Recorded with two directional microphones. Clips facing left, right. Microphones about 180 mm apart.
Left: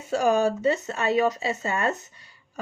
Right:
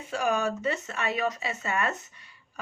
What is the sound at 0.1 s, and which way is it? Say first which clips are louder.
Speech: left 6 dB; 35° left (ahead or behind).